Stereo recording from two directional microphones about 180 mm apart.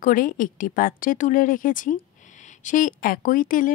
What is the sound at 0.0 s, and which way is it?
A woman's voice, 50° left (ahead or behind).